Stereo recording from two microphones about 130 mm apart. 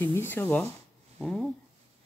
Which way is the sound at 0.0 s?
20° left (ahead or behind).